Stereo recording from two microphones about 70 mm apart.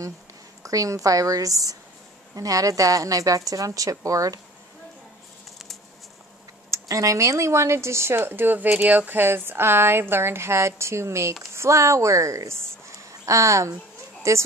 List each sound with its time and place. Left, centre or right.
0.7 s a woman's voice: right
6.7 s a woman's voice: right